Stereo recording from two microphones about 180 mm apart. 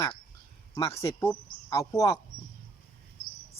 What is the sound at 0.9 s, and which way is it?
Speech, 15° left (ahead or behind).